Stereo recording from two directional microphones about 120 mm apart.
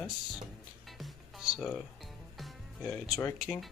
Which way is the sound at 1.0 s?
Centre (ahead or behind).